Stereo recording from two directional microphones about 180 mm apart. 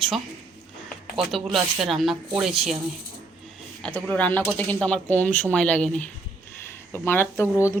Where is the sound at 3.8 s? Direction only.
5° left (ahead or behind).